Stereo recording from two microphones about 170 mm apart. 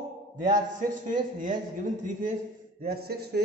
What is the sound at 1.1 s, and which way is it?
Speech, 50° right (ahead or behind).